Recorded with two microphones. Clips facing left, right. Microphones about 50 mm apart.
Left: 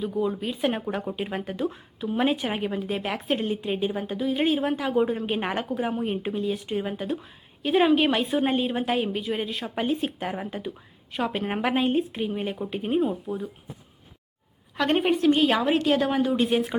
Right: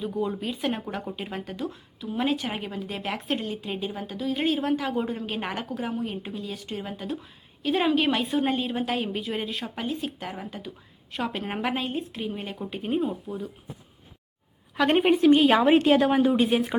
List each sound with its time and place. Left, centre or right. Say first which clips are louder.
0.0 s a woman's voice: left 2 dB; centre
5.9 s speech: left 4 dB; left
6.5 s a woman's voice: left 6 dB; centre
9.8 s speech: left 5 dB; left
10.1 s speech: left 4 dB; centre
11.1 s a woman's voice: left 3 dB; centre
11.8 s speech: left 7 dB; left
12.2 s a woman's voice: left 4 dB; centre
14.8 s a woman's voice: right 2 dB; centre
15.6 s a woman's voice: right 4 dB; right
16.0 s a woman's voice: right 2 dB; centre